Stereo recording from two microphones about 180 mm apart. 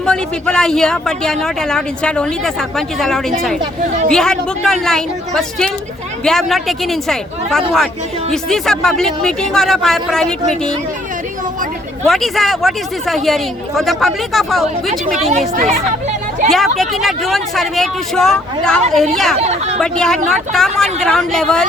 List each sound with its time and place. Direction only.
0.0 s speech: 5° left (ahead or behind)
12.0 s speech: centre (ahead or behind)
16.5 s speech: centre (ahead or behind)
19.4 s speech: 35° right (ahead or behind)
19.8 s speech: 5° left (ahead or behind)